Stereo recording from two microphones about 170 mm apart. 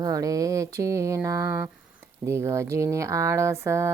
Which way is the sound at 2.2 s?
15° right (ahead or behind).